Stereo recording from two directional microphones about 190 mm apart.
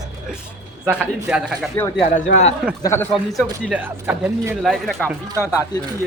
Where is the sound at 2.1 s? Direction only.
40° left (ahead or behind).